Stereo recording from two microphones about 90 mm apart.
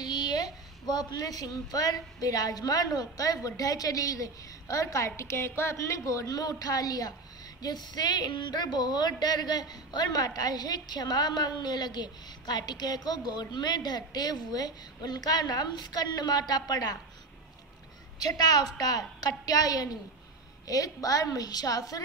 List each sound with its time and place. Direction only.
0.0 s a woman's voice: 50° left (ahead or behind)
18.2 s a woman's voice: 45° left (ahead or behind)